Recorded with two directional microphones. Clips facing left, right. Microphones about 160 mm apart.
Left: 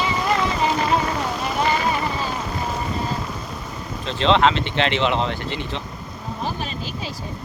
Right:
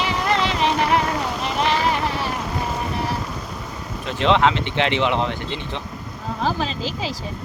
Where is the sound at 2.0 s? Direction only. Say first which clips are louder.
Right 1 dB; 70° right (ahead or behind).